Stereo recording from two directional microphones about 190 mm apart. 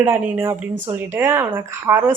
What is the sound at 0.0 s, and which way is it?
Speech, 10° right (ahead or behind).